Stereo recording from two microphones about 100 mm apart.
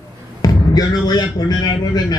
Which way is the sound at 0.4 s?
40° left (ahead or behind).